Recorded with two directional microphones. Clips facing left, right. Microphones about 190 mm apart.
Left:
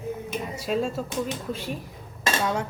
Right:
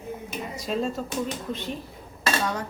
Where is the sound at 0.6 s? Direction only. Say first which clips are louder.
Left 1 dB; 5° left (ahead or behind).